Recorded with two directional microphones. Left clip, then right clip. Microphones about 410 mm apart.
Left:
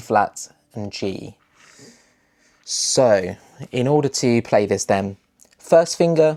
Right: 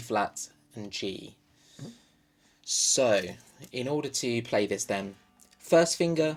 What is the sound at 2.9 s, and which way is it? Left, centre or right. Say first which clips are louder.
Speech: left 10 dB; left.